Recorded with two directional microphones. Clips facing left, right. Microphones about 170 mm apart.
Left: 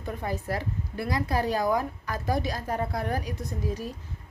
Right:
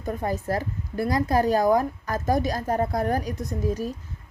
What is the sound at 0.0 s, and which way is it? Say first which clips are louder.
A woman's voice: right 5 dB; 45° right (ahead or behind).